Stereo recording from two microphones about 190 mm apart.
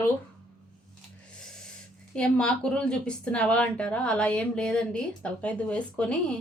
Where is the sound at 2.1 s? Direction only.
5° left (ahead or behind).